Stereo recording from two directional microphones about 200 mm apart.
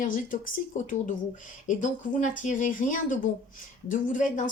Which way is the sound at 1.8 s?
40° left (ahead or behind).